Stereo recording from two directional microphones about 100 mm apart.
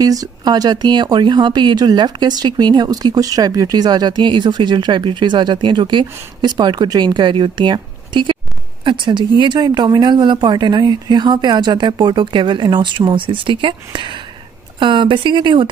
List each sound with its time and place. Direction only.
0.0 s a woman's voice: 40° right (ahead or behind); by 15.7 s 55° right (ahead or behind)